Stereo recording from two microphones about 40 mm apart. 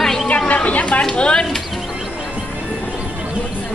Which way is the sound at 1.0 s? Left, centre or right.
Left.